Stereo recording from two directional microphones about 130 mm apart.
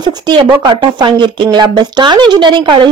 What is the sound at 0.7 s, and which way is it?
A woman's voice, 40° right (ahead or behind).